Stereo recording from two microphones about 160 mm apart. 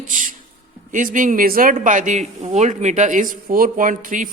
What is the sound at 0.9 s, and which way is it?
Speech, 55° right (ahead or behind).